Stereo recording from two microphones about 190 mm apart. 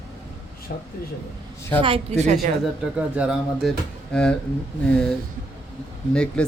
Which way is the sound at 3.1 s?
Centre (ahead or behind).